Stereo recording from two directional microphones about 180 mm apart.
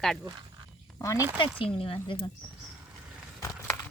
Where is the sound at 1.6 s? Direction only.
30° left (ahead or behind).